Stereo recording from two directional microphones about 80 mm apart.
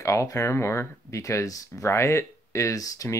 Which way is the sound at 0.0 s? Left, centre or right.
Left.